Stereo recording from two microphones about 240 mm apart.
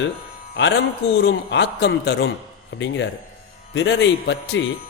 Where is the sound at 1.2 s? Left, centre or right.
Left.